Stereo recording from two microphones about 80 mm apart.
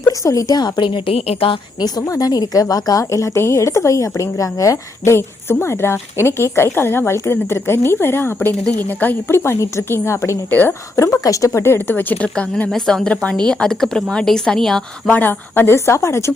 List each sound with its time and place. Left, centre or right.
0.2 s a woman's voice: left
2.0 s a woman's voice: left
8.4 s a woman's voice: centre; by 10.3 s left
10.5 s speech: left
10.9 s speech: left; by 14.8 s centre
15.0 s a woman's voice: left